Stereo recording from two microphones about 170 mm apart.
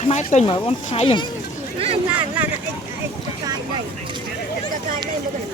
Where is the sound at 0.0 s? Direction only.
45° left (ahead or behind).